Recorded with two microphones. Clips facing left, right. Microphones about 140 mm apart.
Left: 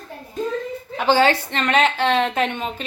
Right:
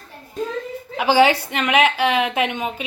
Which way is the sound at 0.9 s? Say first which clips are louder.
Right 1 dB; 10° right (ahead or behind).